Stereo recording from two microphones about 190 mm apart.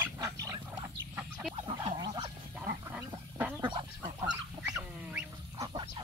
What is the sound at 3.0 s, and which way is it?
Duck, 10° right (ahead or behind).